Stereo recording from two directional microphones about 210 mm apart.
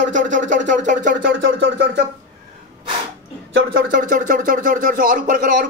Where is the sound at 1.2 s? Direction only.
60° right (ahead or behind).